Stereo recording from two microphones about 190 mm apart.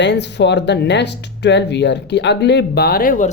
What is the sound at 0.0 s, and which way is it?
A woman's voice, 65° left (ahead or behind).